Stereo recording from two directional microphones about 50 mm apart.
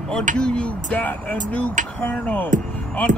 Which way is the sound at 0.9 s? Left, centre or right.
Left.